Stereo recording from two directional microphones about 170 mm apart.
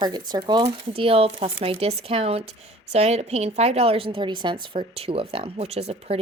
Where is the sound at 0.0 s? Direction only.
25° right (ahead or behind).